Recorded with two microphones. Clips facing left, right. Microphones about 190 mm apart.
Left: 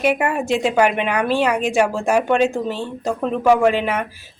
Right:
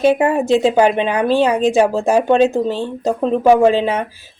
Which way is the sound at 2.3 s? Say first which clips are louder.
Right 4 dB; 35° right (ahead or behind).